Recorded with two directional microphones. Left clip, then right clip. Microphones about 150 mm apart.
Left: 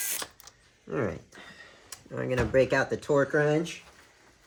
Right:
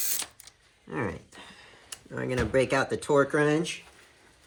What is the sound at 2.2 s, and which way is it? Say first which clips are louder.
Speech: left 1 dB; 40° right (ahead or behind).